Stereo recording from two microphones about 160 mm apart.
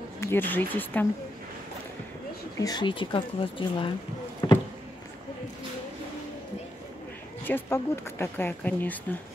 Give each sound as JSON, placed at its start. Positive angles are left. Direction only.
{"t": 0.2, "sound": "speech", "side_deg": 15}
{"t": 2.6, "sound": "speech", "side_deg": 25}
{"t": 4.4, "sound": "rowboat", "side_deg": 20}
{"t": 7.4, "sound": "speech", "side_deg": 15}